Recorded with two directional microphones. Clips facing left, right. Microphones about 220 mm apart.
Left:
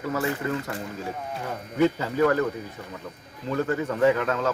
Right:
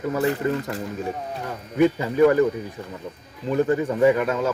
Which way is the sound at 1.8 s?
15° right (ahead or behind).